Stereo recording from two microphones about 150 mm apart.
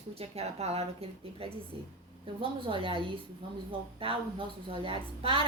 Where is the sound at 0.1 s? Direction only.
45° right (ahead or behind).